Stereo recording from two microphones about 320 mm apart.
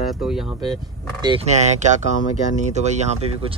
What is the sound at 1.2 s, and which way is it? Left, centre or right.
Speech, centre.